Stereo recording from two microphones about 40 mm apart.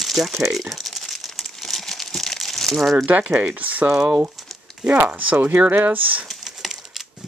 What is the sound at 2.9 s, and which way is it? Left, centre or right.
Speech, right.